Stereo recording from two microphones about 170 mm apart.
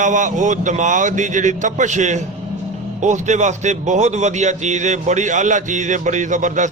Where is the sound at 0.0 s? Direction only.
45° right (ahead or behind).